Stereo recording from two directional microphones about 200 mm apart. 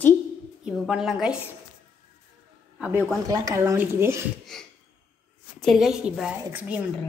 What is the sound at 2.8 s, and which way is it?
Speech, 10° right (ahead or behind).